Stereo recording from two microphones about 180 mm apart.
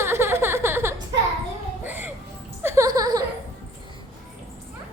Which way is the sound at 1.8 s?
10° right (ahead or behind).